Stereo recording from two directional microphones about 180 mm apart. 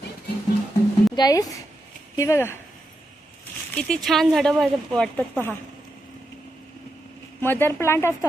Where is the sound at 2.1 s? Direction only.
15° left (ahead or behind).